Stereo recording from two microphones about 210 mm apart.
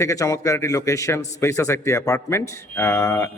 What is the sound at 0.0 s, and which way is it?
A man's voice, 15° left (ahead or behind).